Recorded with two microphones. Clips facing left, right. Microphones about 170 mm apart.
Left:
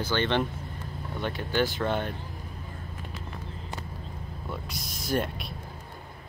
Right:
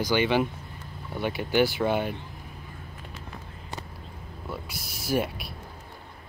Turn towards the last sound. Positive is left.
turn(degrees=-5)  # may be behind; listen again after turning